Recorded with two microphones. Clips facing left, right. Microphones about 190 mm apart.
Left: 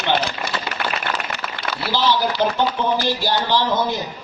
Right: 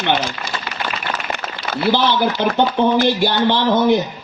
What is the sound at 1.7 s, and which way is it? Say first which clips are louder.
Speech: right 4 dB; 55° right (ahead or behind).